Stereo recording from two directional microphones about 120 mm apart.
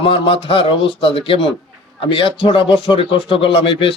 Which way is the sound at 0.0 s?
45° left (ahead or behind).